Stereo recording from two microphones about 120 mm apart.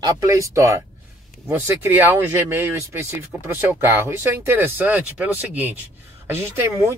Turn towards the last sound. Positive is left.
turn(degrees=-25)  # may be behind; listen again after turning